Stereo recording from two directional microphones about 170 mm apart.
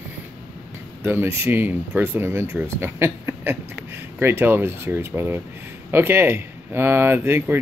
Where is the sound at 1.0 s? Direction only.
15° right (ahead or behind).